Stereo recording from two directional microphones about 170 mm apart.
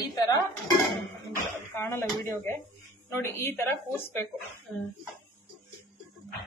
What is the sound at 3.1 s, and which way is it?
Speech, 15° left (ahead or behind).